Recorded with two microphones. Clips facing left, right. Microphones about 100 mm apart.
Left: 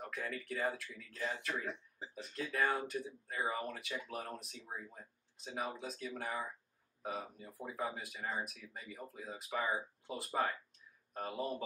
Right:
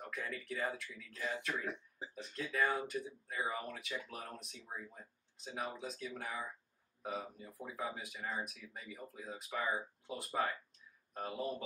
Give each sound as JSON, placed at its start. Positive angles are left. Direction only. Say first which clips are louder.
{"t": 0.0, "sound": "speech", "louder": "left 1 dB", "side_deg": 0}